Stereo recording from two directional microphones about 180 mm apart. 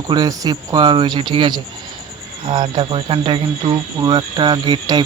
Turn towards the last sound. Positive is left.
turn(degrees=-25)  # may be behind; listen again after turning